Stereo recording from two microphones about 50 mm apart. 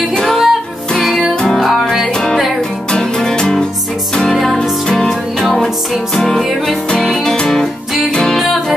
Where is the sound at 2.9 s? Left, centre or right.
Centre.